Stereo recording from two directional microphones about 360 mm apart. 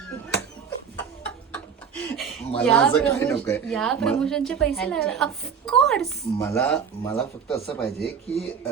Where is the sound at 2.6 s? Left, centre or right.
Centre.